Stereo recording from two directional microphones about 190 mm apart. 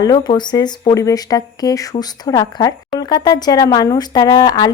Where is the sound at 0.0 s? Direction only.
20° left (ahead or behind).